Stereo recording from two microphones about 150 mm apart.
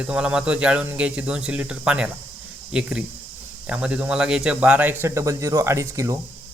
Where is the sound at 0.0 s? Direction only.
5° right (ahead or behind).